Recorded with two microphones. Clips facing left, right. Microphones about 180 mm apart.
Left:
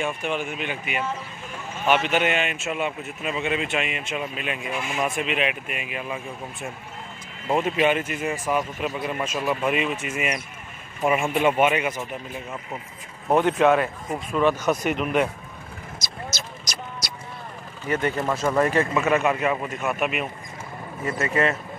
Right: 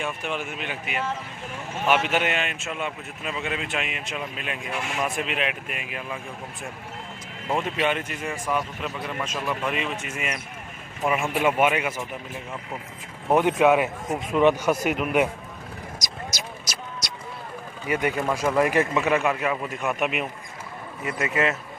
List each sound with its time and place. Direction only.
0.0 s a man's voice: centre (ahead or behind)
7.4 s a man's voice: 5° left (ahead or behind)
11.1 s a man's voice: 5° right (ahead or behind)
13.3 s a man's voice: 10° right (ahead or behind)
16.0 s vehicle: 15° right (ahead or behind)
17.0 s vehicle: 5° left (ahead or behind)
17.8 s a man's voice: 10° right (ahead or behind)
19.2 s a man's voice: centre (ahead or behind)